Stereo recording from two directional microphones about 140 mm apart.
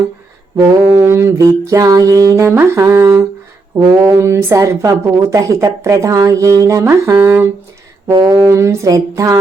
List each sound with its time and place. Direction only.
0.5 s speech: 20° right (ahead or behind)